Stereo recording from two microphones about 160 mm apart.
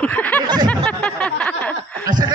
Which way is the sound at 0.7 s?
5° left (ahead or behind).